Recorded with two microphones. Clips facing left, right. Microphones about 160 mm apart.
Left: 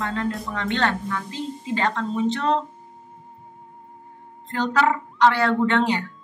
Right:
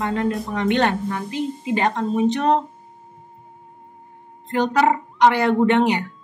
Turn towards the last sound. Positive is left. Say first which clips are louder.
# right 4 dB
turn(degrees=-15)  # may be behind; listen again after turning